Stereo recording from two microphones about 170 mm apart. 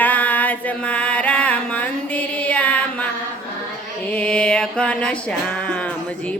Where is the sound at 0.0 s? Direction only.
10° left (ahead or behind).